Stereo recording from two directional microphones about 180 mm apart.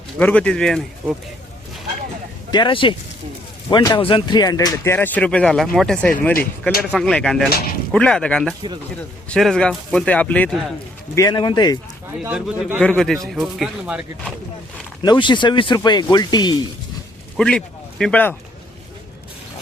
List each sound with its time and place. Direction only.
0.2 s speech: 10° left (ahead or behind)
2.5 s speech: 25° left (ahead or behind); by 10.5 s 10° left (ahead or behind)
11.1 s speech: 20° left (ahead or behind)
12.2 s speech: 10° right (ahead or behind)
12.8 s speech: 5° left (ahead or behind)
15.0 s speech: 25° left (ahead or behind)
17.3 s speech: 5° left (ahead or behind)